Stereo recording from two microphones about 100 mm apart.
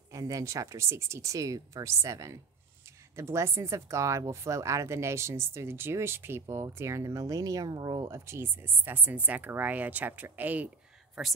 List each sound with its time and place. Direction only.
0.1 s speech: 35° right (ahead or behind)
8.1 s speech: 25° right (ahead or behind)
11.2 s speech: centre (ahead or behind)